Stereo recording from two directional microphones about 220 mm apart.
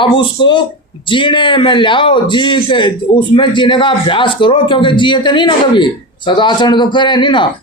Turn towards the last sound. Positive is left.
turn(degrees=20)  # may be behind; listen again after turning